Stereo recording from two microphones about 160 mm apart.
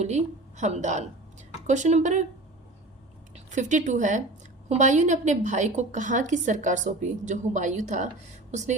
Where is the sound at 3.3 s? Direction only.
50° right (ahead or behind).